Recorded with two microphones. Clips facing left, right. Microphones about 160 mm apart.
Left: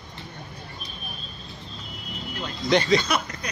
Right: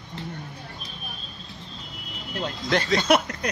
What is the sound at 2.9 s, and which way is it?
Speech, 80° right.